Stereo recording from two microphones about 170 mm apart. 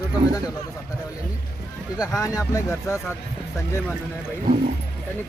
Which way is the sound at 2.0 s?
20° left (ahead or behind).